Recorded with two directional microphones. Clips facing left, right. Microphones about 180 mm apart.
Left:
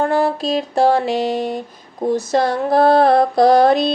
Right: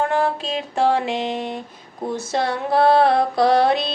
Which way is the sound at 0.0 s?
40° left (ahead or behind).